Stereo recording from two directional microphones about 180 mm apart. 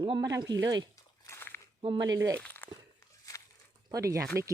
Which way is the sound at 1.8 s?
25° right (ahead or behind).